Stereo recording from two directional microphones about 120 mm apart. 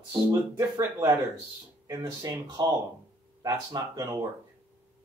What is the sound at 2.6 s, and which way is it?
Speech, 40° right (ahead or behind).